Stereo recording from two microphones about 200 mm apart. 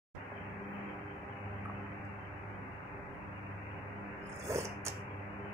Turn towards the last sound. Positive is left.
turn(degrees=-15)  # may be behind; listen again after turning